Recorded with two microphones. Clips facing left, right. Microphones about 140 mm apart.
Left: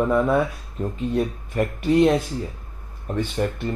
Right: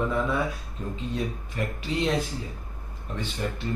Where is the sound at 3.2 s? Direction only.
55° left (ahead or behind).